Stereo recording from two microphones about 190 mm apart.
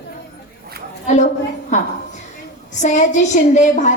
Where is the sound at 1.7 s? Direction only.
40° left (ahead or behind).